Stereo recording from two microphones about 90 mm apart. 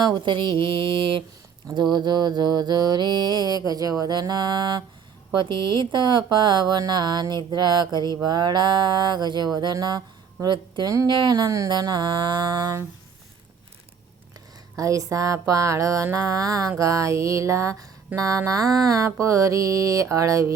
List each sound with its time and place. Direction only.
0.0 s speech: 55° right (ahead or behind)
1.7 s mantra: 55° right (ahead or behind)
5.4 s speech: 60° right (ahead or behind)
6.3 s mantra: 60° right (ahead or behind); by 11.7 s 40° right (ahead or behind)
11.7 s mantra: 55° right (ahead or behind)
14.8 s a sound: 35° right (ahead or behind)